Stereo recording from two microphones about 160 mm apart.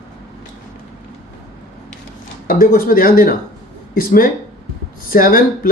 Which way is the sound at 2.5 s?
65° left (ahead or behind).